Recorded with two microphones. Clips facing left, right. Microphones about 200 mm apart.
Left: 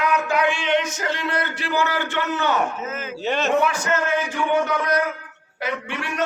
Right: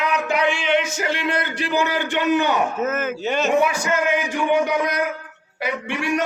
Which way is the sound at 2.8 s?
50° right (ahead or behind).